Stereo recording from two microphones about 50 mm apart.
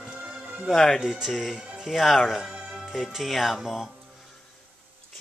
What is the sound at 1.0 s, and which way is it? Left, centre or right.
Speech, centre.